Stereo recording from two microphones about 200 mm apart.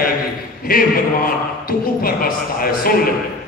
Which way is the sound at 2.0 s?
45° left (ahead or behind).